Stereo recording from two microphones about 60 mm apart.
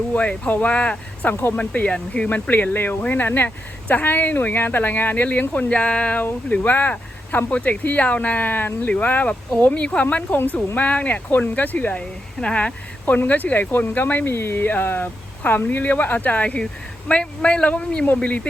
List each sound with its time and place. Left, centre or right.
0.1 s speech: left
6.6 s speech: left
11.9 s speech: centre